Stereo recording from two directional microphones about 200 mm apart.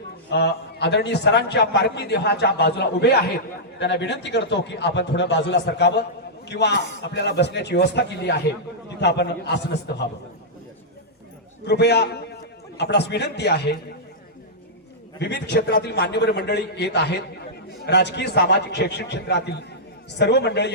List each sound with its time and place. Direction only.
0.3 s a man's voice: 60° left (ahead or behind)
11.6 s a man's voice: 55° left (ahead or behind)
15.2 s a man's voice: 55° left (ahead or behind)